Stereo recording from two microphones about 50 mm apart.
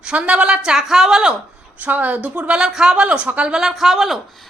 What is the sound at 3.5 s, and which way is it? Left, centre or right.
Speech, centre.